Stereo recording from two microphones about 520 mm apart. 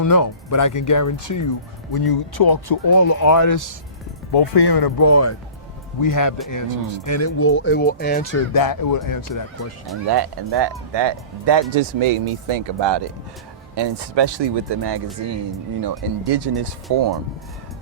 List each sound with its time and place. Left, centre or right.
0.0 s speech: left
4.3 s speech: left
4.9 s speech: left
8.5 s speech: left
10.1 s speech: right
11.7 s speech: right